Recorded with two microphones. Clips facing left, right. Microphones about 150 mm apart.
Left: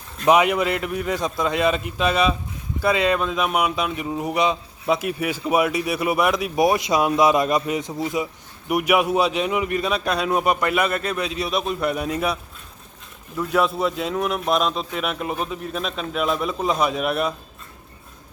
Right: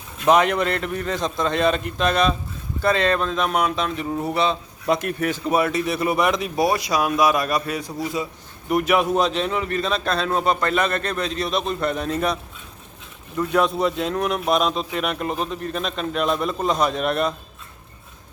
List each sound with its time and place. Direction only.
0.3 s a man's voice: 10° left (ahead or behind)
6.6 s a man's voice: 20° left (ahead or behind)